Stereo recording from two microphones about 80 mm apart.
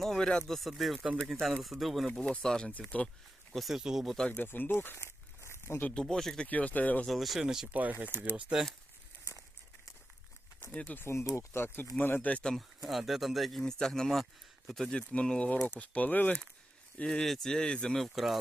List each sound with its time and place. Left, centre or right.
0.0 s speech: centre
2.2 s speech: centre
3.5 s speech: centre
4.3 s speech: left
5.5 s a sound: left
5.8 s speech: centre
6.5 s speech: centre
7.1 s speech: centre
7.7 s speech: right
10.6 s speech: centre
11.0 s speech: left; by 12.5 s centre
12.5 s speech: centre; by 16.4 s left
17.0 s speech: centre
18.1 s speech: centre